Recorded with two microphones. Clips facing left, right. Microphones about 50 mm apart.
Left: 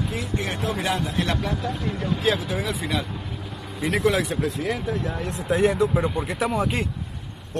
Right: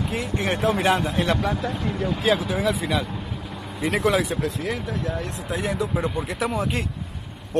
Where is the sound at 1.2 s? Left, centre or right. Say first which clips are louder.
Right 3 dB; centre.